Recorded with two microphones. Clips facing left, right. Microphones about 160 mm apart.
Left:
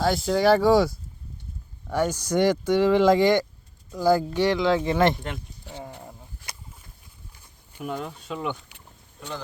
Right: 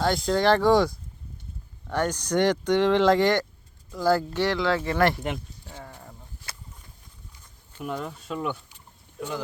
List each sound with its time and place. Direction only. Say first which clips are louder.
0.0 s speech: left 1 dB; 5° left (ahead or behind); by 5.2 s 20° left (ahead or behind)
6.0 s a sound: left 3 dB; 15° left (ahead or behind)
7.9 s speech: even; centre (ahead or behind)